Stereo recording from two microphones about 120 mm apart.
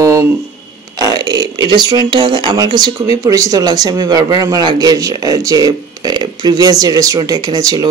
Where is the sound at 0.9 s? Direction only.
35° right (ahead or behind).